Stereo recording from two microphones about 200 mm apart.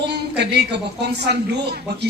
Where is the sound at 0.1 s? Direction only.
55° right (ahead or behind).